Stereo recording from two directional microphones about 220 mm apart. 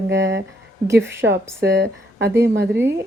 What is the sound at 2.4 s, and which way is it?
Music, 55° right (ahead or behind).